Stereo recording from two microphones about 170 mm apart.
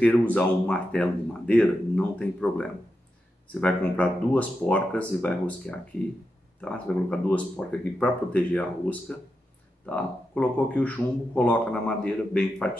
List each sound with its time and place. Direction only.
0.0 s a man's voice: 10° left (ahead or behind)
3.6 s a man's voice: 5° left (ahead or behind)